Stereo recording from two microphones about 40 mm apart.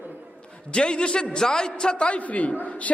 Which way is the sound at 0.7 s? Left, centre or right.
Left.